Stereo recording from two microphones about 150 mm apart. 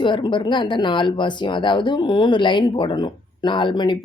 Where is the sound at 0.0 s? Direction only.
30° left (ahead or behind).